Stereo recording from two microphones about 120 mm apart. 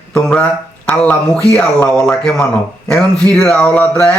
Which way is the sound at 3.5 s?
10° left (ahead or behind).